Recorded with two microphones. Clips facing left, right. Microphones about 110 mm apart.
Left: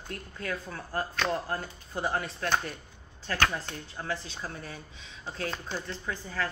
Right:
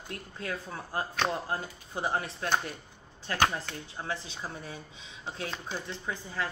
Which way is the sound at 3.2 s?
15° right (ahead or behind).